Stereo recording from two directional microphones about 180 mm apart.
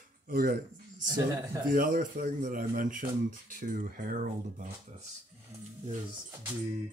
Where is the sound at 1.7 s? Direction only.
50° right (ahead or behind).